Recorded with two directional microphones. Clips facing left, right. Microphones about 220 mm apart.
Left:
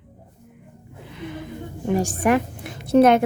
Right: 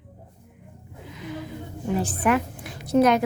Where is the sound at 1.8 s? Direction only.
45° left (ahead or behind).